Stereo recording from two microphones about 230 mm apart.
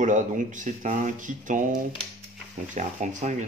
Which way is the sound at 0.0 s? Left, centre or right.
Right.